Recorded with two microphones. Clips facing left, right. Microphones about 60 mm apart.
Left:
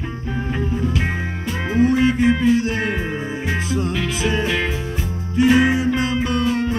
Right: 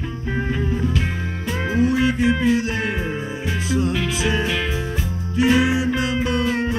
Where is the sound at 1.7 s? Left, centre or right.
Left.